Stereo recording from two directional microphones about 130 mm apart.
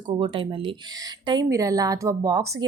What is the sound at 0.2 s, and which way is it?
Speech, 40° right (ahead or behind).